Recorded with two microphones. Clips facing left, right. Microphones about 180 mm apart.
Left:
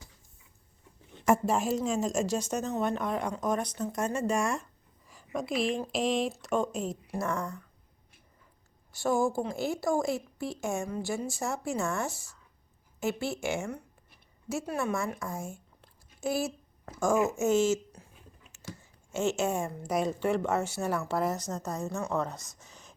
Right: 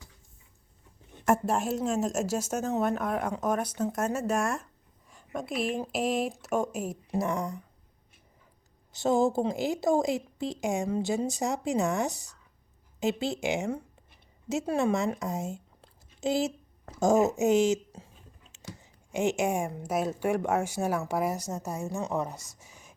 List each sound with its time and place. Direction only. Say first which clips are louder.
1.2 s a woman's voice: even; centre (ahead or behind)
8.9 s a woman's voice: right 3 dB; 20° right (ahead or behind)